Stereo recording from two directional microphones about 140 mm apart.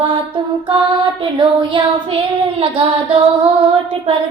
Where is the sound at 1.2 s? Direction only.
35° right (ahead or behind).